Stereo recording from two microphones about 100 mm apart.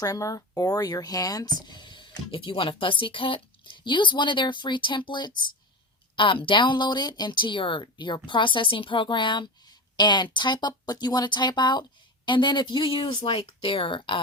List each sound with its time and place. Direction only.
0.0 s speech: 35° left (ahead or behind)
6.1 s speech: 60° left (ahead or behind)